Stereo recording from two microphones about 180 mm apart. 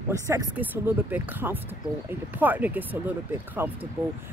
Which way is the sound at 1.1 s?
10° right (ahead or behind).